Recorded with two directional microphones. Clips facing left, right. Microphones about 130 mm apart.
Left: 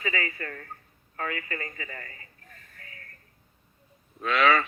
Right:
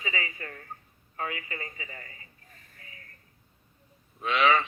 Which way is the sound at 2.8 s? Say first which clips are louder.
Left 2 dB; 20° right (ahead or behind).